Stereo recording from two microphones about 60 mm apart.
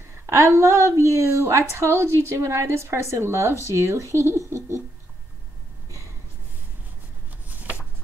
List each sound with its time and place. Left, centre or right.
0.3 s speech: right